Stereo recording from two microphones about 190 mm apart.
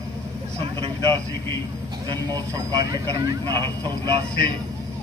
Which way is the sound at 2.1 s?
20° right (ahead or behind).